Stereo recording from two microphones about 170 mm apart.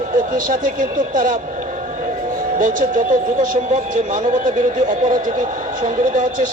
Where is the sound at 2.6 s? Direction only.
55° right (ahead or behind).